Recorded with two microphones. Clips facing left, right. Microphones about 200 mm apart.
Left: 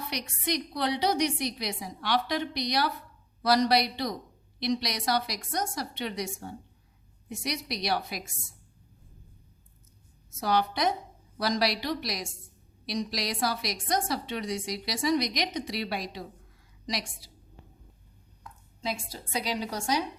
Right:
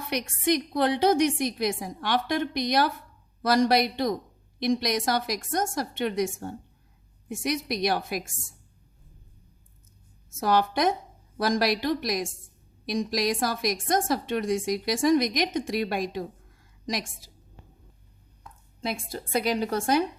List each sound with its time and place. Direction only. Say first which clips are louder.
0.1 s a woman's voice: right 8 dB; 50° right (ahead or behind)
10.2 s a woman's voice: right 3 dB; 50° right (ahead or behind)
18.8 s a woman's voice: right 3 dB; 55° right (ahead or behind)